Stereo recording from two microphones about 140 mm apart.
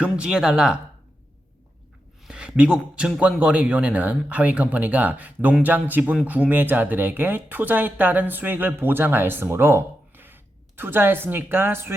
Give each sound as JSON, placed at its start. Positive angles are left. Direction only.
{"t": 0.0, "sound": "speech", "side_deg": -5}
{"t": 2.2, "sound": "a sound", "side_deg": -5}
{"t": 3.2, "sound": "speech", "side_deg": -5}